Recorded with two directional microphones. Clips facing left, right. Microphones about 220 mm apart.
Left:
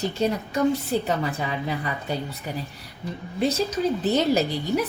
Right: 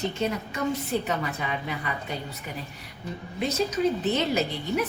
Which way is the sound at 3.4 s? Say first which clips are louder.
Left 2 dB; 30° left (ahead or behind).